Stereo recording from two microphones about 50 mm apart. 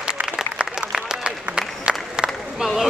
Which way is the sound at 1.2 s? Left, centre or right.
Centre.